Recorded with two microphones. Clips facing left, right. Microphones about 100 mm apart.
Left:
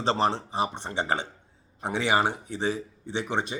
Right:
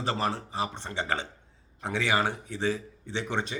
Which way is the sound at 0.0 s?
25° left (ahead or behind).